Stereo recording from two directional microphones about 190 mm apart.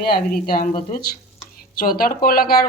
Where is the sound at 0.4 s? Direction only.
50° left (ahead or behind).